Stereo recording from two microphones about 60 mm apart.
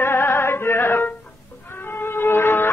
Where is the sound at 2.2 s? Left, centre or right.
Left.